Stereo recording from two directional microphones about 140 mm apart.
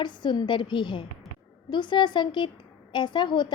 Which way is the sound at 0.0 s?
35° left (ahead or behind).